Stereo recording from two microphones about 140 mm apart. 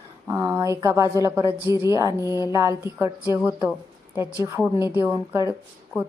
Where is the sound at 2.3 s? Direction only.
25° left (ahead or behind).